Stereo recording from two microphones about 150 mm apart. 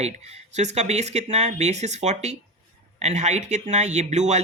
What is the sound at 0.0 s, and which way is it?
Speech, 45° right (ahead or behind).